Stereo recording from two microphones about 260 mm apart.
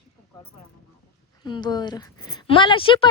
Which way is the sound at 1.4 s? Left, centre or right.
Centre.